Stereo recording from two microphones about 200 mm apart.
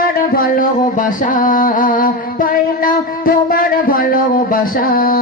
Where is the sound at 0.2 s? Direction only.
45° left (ahead or behind).